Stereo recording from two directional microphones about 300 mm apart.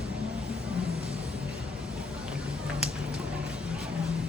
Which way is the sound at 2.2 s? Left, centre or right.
Centre.